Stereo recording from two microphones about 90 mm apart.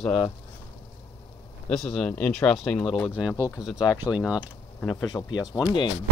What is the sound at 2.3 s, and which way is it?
Speech, 5° left (ahead or behind).